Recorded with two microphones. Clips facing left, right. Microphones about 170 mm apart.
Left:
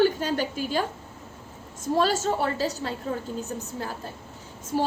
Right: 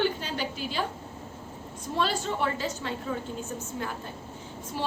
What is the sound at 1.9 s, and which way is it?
A woman's voice, 45° left (ahead or behind).